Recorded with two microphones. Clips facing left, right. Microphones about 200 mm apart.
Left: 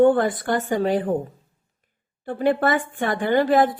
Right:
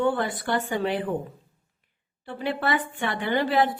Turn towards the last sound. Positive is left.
turn(degrees=45)  # may be behind; listen again after turning